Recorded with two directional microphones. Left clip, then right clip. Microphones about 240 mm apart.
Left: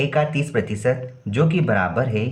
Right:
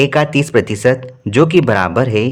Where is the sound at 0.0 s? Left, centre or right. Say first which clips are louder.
Right 8 dB; right.